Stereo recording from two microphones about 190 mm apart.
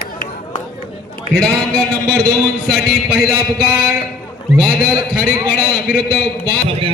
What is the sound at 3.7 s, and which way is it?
Speech, 15° right (ahead or behind).